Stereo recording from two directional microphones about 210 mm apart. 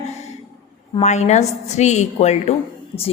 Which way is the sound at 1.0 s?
35° left (ahead or behind).